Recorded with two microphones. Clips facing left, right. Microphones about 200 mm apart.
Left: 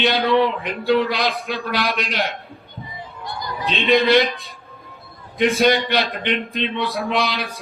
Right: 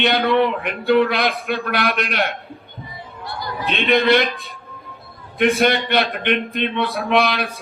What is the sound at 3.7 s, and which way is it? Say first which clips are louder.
Speech: right 2 dB; 60° right (ahead or behind).